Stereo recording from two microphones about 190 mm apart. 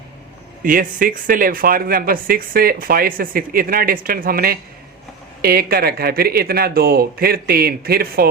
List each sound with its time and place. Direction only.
0.6 s speech: 45° right (ahead or behind)